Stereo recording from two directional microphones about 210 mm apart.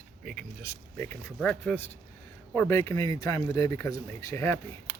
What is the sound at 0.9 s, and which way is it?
Speech, 10° left (ahead or behind).